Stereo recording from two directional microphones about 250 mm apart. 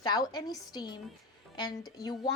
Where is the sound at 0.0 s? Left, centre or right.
Centre.